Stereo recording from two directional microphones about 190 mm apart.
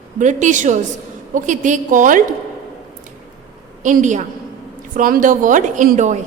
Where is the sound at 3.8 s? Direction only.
40° right (ahead or behind).